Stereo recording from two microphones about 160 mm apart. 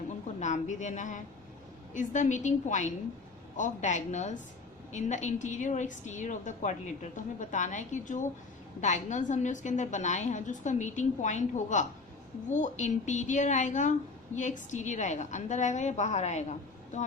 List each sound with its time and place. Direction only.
0.3 s a woman's voice: 45° left (ahead or behind)